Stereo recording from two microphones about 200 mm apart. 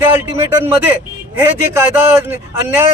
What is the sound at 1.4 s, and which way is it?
A man's voice, 10° right (ahead or behind).